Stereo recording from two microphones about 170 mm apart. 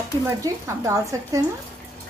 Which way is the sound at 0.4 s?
20° right (ahead or behind).